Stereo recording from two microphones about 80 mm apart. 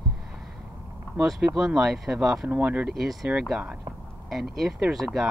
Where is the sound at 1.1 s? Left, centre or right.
Centre.